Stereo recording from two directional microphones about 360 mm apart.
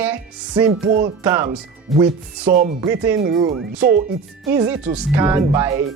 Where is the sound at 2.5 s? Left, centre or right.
Centre.